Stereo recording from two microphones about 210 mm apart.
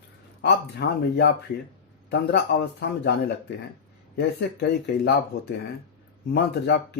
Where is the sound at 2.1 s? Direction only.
50° left (ahead or behind).